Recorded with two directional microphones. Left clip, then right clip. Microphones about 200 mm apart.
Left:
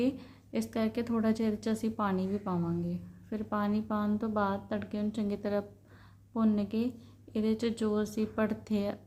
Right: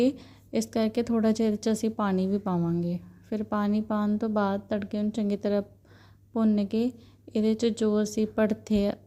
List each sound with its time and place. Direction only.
0.0 s a woman's voice: 35° right (ahead or behind)